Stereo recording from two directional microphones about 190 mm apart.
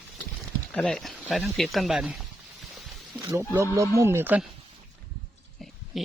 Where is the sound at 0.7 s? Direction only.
5° left (ahead or behind).